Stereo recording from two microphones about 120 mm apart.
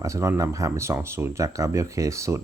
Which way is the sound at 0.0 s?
25° right (ahead or behind).